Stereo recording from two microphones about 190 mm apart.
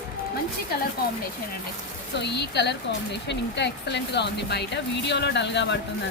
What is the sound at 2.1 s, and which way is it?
Speech, 60° left (ahead or behind).